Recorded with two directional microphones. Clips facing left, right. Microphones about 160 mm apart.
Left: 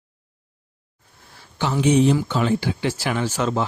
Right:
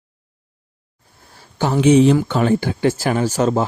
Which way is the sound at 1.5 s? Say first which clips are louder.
Right 5 dB; 45° right (ahead or behind).